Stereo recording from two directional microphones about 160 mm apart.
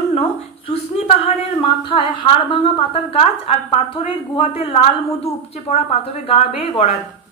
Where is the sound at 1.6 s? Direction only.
30° left (ahead or behind).